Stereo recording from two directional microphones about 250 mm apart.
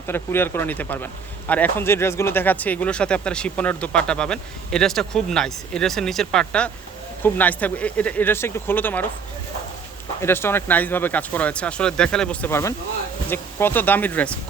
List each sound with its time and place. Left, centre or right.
0.1 s speech: centre
10.2 s speech: centre